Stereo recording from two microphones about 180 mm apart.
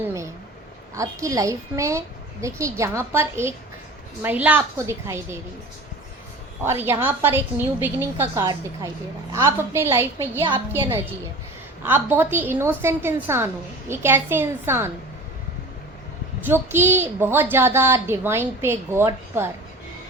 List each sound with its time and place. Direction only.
0.0 s a woman's voice: 15° right (ahead or behind)
6.7 s a woman's voice: 10° right (ahead or behind)
11.8 s a woman's voice: 10° right (ahead or behind)
16.5 s a woman's voice: 10° right (ahead or behind)